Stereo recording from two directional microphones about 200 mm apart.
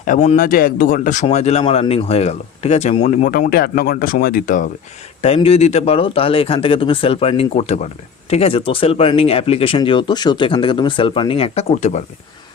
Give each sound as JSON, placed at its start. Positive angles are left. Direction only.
{"t": 0.0, "sound": "speech", "side_deg": 35}
{"t": 5.2, "sound": "speech", "side_deg": 30}